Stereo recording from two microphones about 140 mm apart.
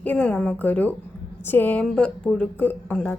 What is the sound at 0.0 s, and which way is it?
Speech, 10° left (ahead or behind).